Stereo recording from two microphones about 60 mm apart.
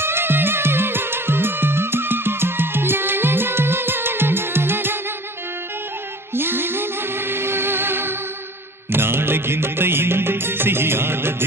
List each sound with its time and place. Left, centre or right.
0.0 s music: right
6.3 s music: right